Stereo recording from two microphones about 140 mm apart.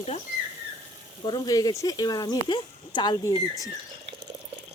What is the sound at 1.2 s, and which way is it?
Speech, 30° left (ahead or behind).